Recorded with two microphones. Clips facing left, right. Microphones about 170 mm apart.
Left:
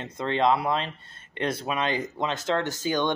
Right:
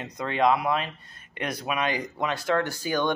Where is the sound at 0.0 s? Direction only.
25° left (ahead or behind).